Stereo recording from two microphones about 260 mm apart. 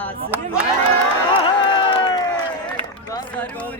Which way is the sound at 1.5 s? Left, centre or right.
Centre.